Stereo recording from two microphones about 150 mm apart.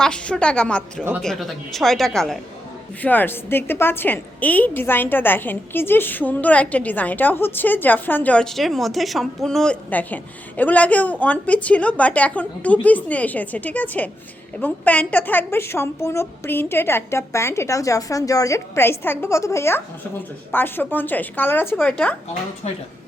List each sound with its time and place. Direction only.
0.0 s a woman's voice: 5° left (ahead or behind)